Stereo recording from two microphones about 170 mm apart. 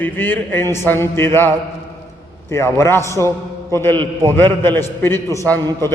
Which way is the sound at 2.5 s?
15° left (ahead or behind).